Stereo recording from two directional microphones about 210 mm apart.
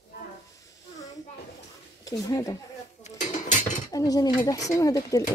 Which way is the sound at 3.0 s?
35° left (ahead or behind).